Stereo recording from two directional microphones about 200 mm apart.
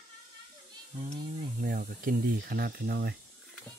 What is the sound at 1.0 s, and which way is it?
Speech, 40° right (ahead or behind).